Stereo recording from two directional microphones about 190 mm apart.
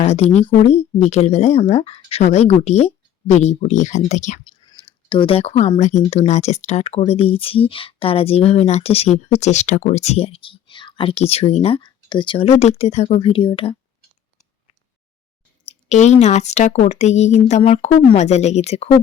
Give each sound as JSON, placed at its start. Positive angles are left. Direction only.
{"t": 0.0, "sound": "speech", "side_deg": 35}
{"t": 4.9, "sound": "speech", "side_deg": 25}
{"t": 15.6, "sound": "speech", "side_deg": 35}